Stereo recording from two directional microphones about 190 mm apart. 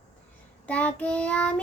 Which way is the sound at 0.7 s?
5° left (ahead or behind).